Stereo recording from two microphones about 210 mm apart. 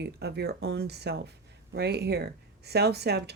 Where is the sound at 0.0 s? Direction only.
50° right (ahead or behind).